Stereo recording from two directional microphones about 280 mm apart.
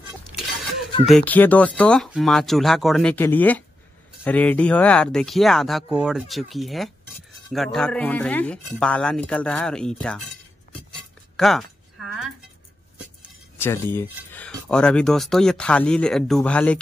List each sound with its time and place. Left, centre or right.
0.3 s a sound: centre
1.0 s speech: centre
11.3 s speech: centre
13.6 s speech: centre